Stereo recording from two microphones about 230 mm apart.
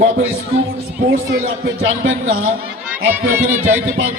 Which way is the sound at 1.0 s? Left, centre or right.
Right.